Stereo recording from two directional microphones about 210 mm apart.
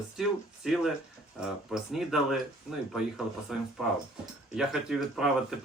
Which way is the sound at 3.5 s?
5° right (ahead or behind).